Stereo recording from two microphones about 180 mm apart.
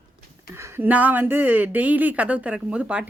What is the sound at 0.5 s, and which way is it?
A woman's voice, 15° right (ahead or behind).